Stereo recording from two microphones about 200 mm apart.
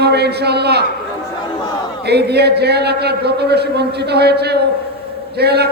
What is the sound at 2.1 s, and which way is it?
A man's voice, 55° right (ahead or behind).